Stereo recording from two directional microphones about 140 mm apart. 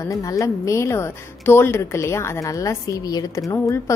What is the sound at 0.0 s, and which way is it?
Speech, 25° left (ahead or behind).